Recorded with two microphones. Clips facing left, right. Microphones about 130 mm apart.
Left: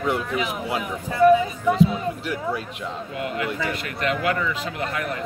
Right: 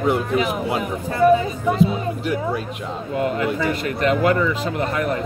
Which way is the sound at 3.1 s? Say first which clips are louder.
Right 7 dB; 40° right (ahead or behind).